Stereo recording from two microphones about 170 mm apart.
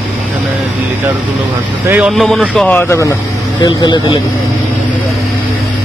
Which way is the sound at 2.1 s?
Centre (ahead or behind).